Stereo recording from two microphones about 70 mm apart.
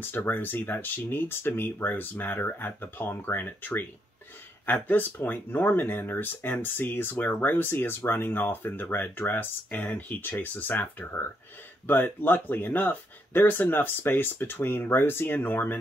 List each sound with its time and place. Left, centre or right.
0.0 s speech: left